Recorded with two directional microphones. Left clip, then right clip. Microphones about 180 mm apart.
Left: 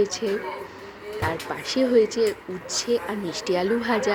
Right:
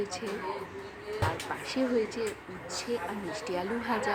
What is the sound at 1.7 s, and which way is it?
Speech, 30° left (ahead or behind).